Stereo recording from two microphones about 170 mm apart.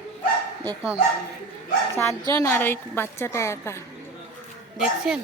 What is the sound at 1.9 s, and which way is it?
A woman's voice, 15° left (ahead or behind).